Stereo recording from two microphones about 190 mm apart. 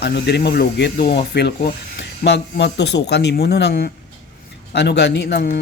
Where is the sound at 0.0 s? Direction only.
60° left (ahead or behind).